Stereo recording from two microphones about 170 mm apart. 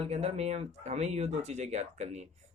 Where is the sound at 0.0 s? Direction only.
35° right (ahead or behind).